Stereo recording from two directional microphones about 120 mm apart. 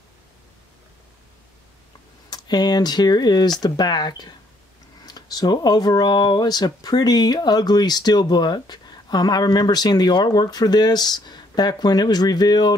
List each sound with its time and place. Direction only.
2.2 s speech: 35° left (ahead or behind)